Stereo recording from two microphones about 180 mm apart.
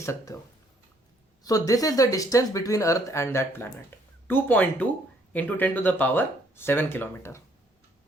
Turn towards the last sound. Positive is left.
turn(degrees=10)  # may be behind; listen again after turning